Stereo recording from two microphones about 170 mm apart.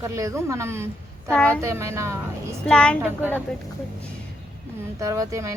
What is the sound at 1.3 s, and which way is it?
Speech, 5° left (ahead or behind).